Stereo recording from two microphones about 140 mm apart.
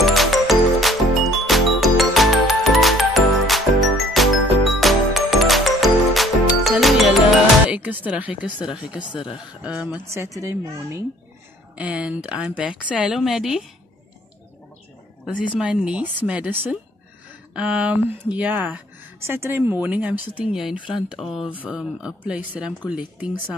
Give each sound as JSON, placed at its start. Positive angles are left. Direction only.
{"t": 0.0, "sound": "music", "side_deg": 0}
{"t": 7.7, "sound": "a woman's voice", "side_deg": -10}
{"t": 11.7, "sound": "a woman's voice", "side_deg": -10}
{"t": 15.2, "sound": "a woman's voice", "side_deg": -10}